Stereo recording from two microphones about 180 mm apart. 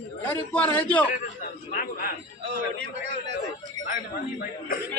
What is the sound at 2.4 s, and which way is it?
Speech, 70° right (ahead or behind).